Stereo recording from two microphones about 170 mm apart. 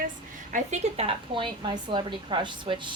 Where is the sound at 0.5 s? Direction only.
40° right (ahead or behind).